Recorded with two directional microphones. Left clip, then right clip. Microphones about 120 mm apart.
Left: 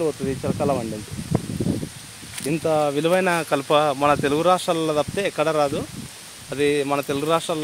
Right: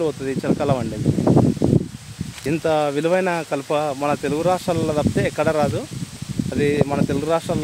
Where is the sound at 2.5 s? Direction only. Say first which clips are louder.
Right 1 dB; 40° right (ahead or behind).